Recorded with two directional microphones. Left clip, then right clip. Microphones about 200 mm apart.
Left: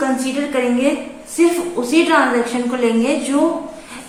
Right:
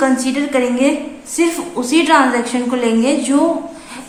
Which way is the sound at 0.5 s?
40° right (ahead or behind).